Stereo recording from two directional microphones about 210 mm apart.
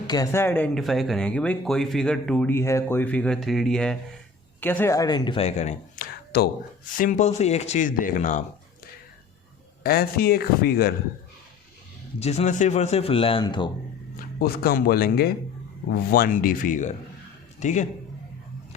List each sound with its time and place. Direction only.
0.1 s speech: 15° left (ahead or behind); by 6.1 s 35° left (ahead or behind)
6.3 s speech: 50° left (ahead or behind)
9.8 s speech: 45° left (ahead or behind)
12.2 s speech: 30° left (ahead or behind)
14.3 s a man's voice: 45° left (ahead or behind)